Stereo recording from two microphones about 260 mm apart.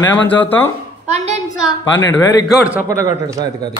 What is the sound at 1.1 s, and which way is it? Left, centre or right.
Speech, right.